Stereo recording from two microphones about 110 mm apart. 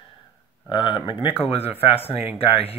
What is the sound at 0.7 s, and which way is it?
Speech, 45° left (ahead or behind).